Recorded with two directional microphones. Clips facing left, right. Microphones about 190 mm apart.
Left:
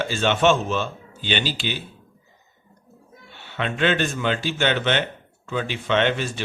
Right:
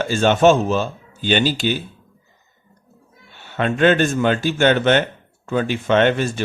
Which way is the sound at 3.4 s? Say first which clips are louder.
Right 7 dB; 45° right (ahead or behind).